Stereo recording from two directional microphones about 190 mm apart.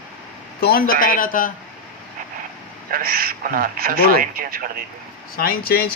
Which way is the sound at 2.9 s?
50° right (ahead or behind).